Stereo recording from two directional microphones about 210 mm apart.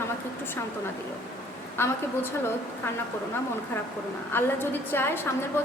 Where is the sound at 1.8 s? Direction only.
10° left (ahead or behind).